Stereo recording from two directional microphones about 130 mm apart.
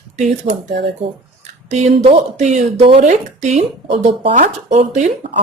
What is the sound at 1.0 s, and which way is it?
Speech, 40° right (ahead or behind).